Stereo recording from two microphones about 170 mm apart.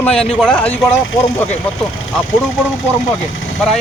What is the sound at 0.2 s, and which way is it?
Speech, 5° left (ahead or behind).